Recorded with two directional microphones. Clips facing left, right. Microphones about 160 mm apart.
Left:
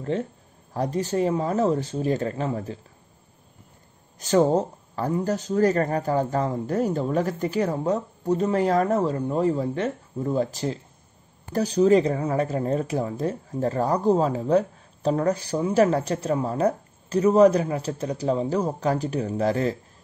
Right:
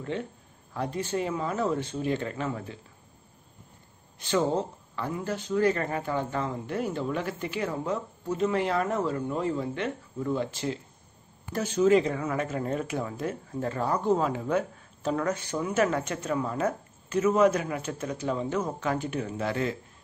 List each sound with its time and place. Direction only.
0.1 s speech: 40° left (ahead or behind)
4.2 s speech: 40° left (ahead or behind)